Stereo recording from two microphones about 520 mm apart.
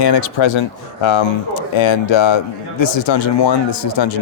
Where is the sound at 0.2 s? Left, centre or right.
Left.